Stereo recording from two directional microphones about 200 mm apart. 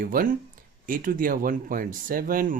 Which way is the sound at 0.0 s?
45° right (ahead or behind).